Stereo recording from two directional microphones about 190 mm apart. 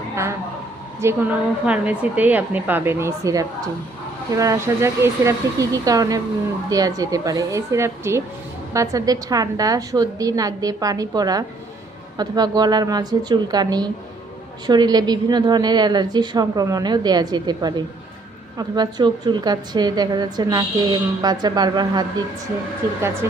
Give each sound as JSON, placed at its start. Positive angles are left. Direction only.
{"t": 1.0, "sound": "a woman's voice", "side_deg": -10}
{"t": 23.2, "sound": "speech", "side_deg": -15}